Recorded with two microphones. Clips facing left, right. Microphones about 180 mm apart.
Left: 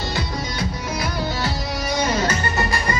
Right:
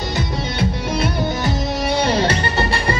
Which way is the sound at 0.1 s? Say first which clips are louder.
Right 3 dB; 25° right (ahead or behind).